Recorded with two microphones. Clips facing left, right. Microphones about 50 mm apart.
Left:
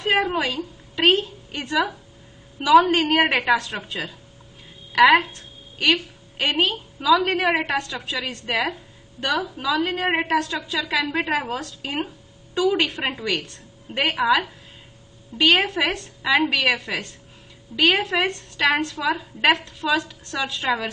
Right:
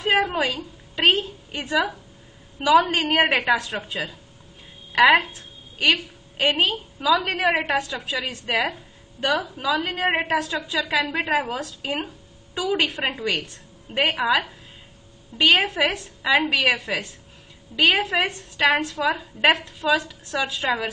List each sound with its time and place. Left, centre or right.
0.0 s a woman's voice: centre
18.1 s a woman's voice: centre
18.6 s a woman's voice: centre